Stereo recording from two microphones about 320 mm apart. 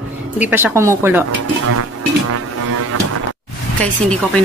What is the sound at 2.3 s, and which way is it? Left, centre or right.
Music, right.